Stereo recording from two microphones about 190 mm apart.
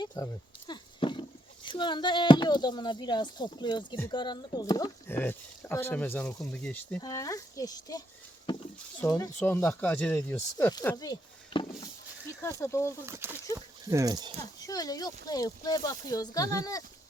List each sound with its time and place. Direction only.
0.0 s speech: 15° left (ahead or behind)
0.7 s roaring cats: 25° left (ahead or behind)
1.6 s speech: 25° left (ahead or behind); by 7.0 s 5° left (ahead or behind)
7.0 s speech: 15° left (ahead or behind)
8.5 s a sound: 25° left (ahead or behind)
9.0 s speech: 15° left (ahead or behind)
13.1 s speech: 10° right (ahead or behind)
14.6 s speech: 20° left (ahead or behind)